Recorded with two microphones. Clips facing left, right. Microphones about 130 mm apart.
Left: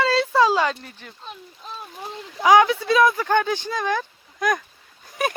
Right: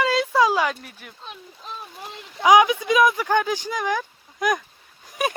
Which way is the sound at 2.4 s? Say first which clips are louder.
Even; 15° right (ahead or behind).